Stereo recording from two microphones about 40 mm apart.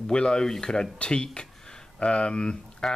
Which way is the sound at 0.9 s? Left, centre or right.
Left.